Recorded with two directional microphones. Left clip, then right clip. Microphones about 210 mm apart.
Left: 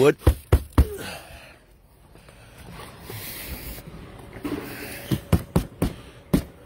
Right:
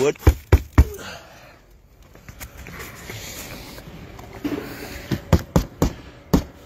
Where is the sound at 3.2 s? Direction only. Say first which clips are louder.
Even; 35° left (ahead or behind).